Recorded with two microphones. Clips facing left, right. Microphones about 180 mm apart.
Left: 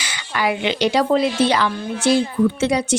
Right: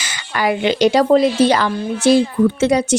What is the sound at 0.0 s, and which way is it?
Speech, 45° right (ahead or behind).